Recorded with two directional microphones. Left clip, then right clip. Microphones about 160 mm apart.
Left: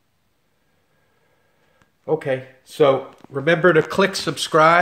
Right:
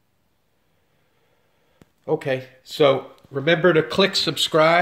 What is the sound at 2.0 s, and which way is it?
Speech, 5° right (ahead or behind).